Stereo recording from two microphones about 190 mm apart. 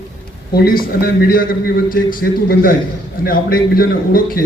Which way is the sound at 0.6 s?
50° left (ahead or behind).